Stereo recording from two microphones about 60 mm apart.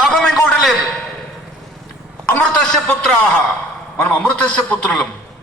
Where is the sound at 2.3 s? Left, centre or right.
Centre.